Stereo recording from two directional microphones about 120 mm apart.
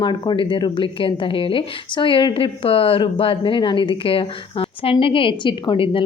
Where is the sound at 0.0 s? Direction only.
40° left (ahead or behind).